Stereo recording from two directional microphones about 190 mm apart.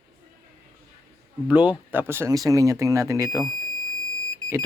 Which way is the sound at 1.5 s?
10° right (ahead or behind).